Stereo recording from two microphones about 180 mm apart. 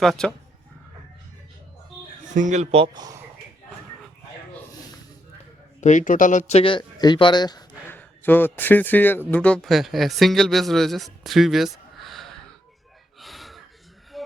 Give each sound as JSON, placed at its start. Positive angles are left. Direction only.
{"t": 0.0, "sound": "speech", "side_deg": 5}
{"t": 2.3, "sound": "speech", "side_deg": -45}
{"t": 5.8, "sound": "speech", "side_deg": 45}
{"t": 7.9, "sound": "a man's voice", "side_deg": 10}
{"t": 13.1, "sound": "gasp", "side_deg": 0}